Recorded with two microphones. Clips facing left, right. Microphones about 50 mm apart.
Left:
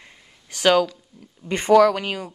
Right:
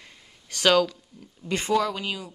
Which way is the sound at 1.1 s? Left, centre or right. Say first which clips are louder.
Left 1 dB; centre.